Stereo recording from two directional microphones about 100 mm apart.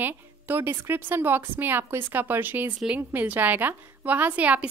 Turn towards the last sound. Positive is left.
turn(degrees=-15)  # may be behind; listen again after turning